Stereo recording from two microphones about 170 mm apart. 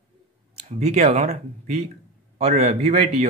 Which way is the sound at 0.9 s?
40° right (ahead or behind).